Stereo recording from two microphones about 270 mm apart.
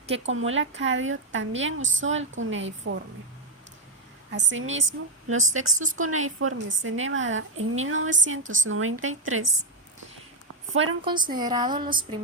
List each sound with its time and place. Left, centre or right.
0.2 s a woman's voice: right
4.3 s a woman's voice: right
5.7 s speech: right
6.0 s a woman's voice: right
11.0 s a woman's voice: centre